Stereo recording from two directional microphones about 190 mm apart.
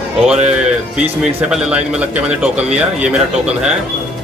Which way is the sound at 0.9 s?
5° right (ahead or behind).